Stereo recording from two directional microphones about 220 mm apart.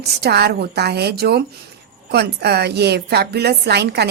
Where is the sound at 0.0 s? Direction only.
45° right (ahead or behind).